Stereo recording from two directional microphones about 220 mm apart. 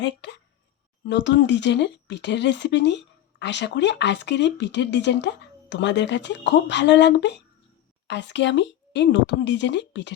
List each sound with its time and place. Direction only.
1.0 s speech: 55° left (ahead or behind)